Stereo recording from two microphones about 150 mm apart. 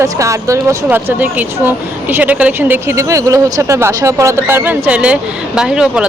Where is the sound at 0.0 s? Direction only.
20° right (ahead or behind).